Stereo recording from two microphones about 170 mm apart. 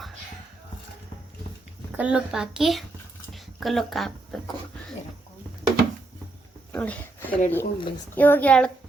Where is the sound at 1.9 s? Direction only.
10° right (ahead or behind).